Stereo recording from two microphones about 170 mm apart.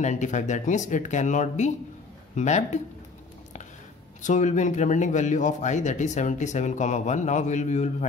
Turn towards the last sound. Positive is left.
turn(degrees=45)  # may be behind; listen again after turning